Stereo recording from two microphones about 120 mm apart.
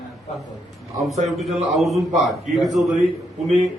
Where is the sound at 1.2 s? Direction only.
Centre (ahead or behind).